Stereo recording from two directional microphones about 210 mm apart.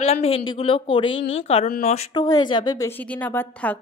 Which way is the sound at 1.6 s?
35° left (ahead or behind).